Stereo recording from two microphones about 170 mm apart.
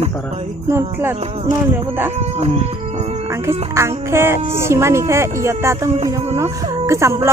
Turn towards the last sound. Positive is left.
turn(degrees=-15)  # may be behind; listen again after turning